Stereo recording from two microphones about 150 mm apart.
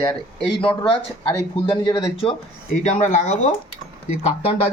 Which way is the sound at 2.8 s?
50° left (ahead or behind).